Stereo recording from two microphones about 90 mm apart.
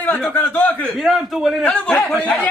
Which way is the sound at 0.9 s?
5° right (ahead or behind).